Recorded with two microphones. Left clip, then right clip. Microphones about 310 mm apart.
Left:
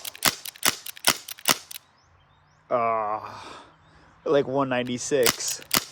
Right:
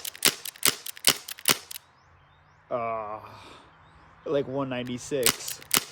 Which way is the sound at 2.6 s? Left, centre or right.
Left.